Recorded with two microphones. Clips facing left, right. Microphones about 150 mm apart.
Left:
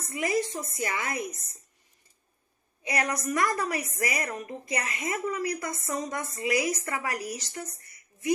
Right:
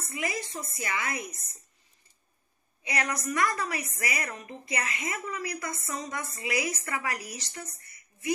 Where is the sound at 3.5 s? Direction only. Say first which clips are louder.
Left 3 dB; 40° left (ahead or behind).